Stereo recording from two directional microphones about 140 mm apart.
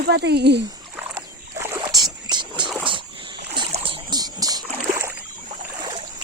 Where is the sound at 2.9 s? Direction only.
35° right (ahead or behind).